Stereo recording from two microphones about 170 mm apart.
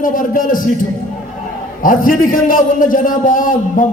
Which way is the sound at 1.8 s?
55° left (ahead or behind).